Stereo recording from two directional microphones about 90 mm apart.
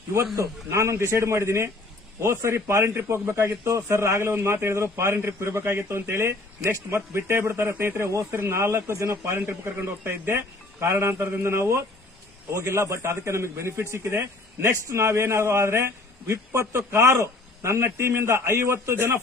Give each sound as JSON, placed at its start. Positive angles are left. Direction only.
{"t": 0.3, "sound": "a man's voice", "side_deg": -35}